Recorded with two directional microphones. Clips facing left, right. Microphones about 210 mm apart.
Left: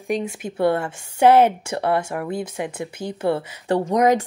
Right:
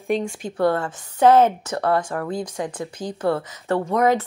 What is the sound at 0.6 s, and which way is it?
Speech, 25° left (ahead or behind).